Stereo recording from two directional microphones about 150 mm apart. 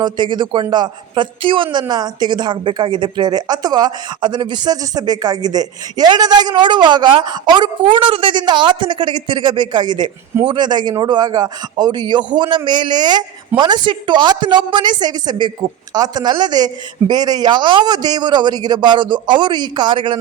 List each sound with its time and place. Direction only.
0.0 s a man's voice: 30° right (ahead or behind)